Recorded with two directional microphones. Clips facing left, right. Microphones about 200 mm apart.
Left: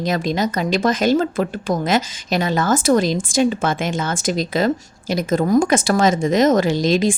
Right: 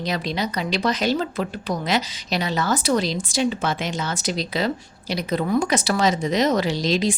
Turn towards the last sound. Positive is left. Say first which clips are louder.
# left 5 dB
turn(degrees=50)  # may be behind; listen again after turning